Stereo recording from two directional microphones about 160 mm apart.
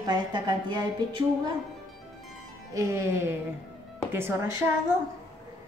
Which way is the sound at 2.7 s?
15° right (ahead or behind).